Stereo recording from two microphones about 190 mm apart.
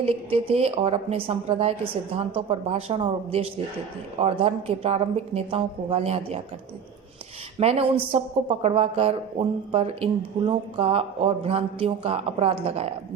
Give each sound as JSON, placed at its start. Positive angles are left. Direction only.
{"t": 0.0, "sound": "a woman's voice", "side_deg": -30}
{"t": 7.6, "sound": "speech", "side_deg": -30}